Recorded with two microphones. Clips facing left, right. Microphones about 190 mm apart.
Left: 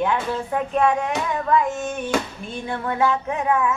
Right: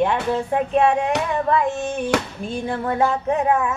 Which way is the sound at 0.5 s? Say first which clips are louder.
Right 2 dB; 30° right (ahead or behind).